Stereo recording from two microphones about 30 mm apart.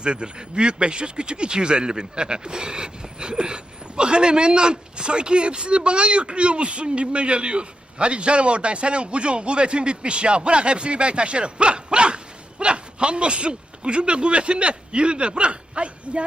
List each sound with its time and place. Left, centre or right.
0.0 s speech: right